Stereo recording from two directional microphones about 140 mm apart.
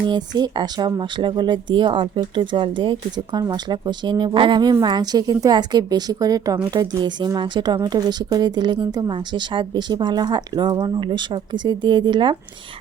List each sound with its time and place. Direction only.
0.0 s a woman's voice: 30° right (ahead or behind)